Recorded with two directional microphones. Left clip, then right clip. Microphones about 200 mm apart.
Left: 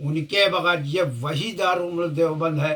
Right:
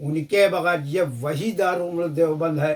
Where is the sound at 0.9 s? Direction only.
20° right (ahead or behind).